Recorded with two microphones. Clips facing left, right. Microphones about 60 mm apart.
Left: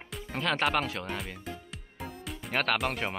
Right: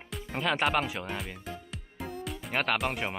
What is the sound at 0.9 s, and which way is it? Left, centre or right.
Music, centre.